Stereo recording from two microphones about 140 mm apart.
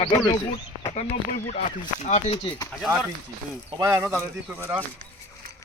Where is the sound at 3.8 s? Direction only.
25° right (ahead or behind).